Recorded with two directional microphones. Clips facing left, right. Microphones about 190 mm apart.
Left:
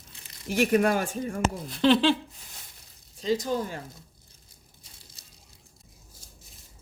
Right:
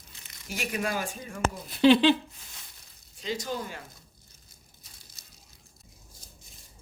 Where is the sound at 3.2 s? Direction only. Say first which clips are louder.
Left 6 dB; 35° left (ahead or behind).